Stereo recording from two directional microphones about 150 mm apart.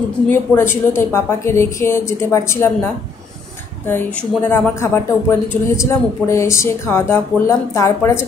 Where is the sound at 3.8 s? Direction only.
15° left (ahead or behind).